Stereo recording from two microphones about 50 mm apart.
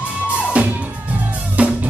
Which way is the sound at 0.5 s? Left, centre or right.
Right.